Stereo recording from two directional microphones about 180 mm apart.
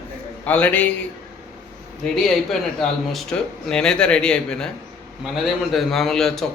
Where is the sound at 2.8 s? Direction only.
5° left (ahead or behind).